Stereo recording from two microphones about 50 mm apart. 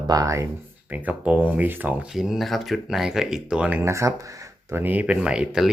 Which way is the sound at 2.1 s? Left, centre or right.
Centre.